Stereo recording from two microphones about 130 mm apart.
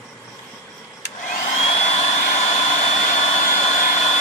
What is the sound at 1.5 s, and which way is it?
Vehicle, 55° left (ahead or behind).